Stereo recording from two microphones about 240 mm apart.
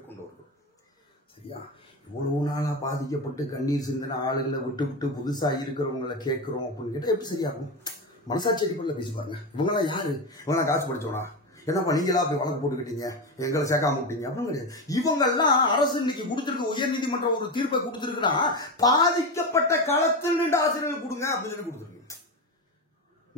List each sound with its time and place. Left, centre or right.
2.4 s a man's voice: centre